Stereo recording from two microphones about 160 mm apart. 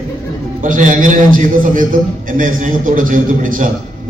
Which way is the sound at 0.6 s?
55° right (ahead or behind).